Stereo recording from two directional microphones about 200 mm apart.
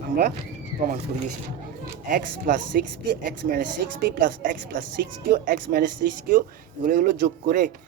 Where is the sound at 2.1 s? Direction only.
40° right (ahead or behind).